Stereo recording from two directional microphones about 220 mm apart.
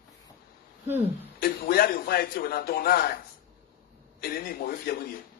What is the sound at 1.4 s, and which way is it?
A man's voice, 45° left (ahead or behind).